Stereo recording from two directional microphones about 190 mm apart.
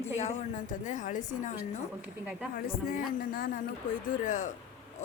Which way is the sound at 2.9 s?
45° left (ahead or behind).